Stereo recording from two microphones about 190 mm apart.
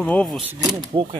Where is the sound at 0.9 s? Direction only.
25° right (ahead or behind).